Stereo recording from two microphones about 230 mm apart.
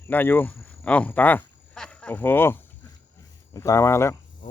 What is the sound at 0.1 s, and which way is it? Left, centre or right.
Speech, centre.